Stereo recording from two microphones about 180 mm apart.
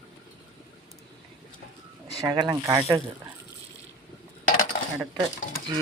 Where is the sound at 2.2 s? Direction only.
25° right (ahead or behind).